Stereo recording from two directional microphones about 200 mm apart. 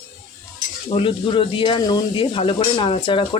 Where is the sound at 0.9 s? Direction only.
25° left (ahead or behind).